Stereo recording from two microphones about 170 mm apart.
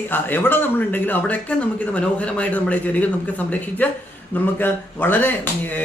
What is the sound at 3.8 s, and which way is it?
A man's voice, 10° left (ahead or behind).